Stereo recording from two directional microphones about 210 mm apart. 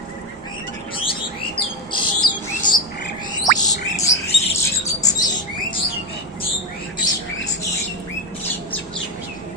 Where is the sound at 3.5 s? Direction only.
20° left (ahead or behind).